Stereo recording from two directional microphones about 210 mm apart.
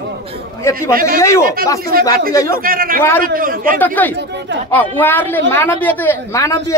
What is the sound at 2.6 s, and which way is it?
A man's voice, 45° right (ahead or behind).